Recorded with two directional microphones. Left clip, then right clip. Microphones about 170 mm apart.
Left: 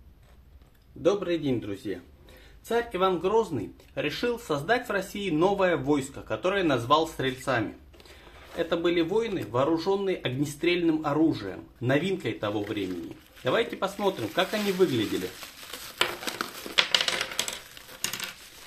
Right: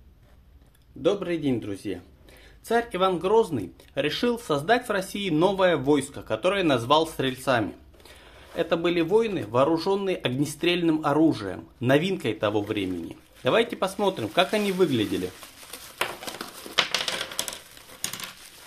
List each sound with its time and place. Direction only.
1.0 s speech: 20° right (ahead or behind)
16.7 s typewriter: 15° right (ahead or behind)